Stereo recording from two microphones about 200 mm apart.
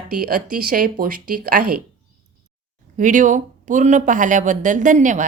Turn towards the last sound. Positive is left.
turn(degrees=-40)  # may be behind; listen again after turning